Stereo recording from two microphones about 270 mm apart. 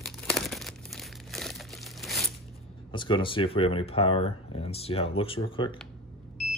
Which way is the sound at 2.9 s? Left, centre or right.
Centre.